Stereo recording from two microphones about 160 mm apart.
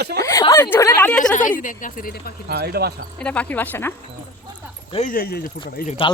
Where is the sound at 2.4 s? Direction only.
85° right.